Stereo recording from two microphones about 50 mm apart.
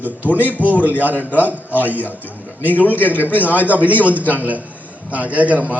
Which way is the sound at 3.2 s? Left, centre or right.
Left.